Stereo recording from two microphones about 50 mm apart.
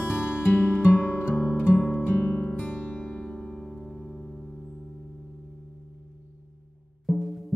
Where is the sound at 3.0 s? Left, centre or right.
Centre.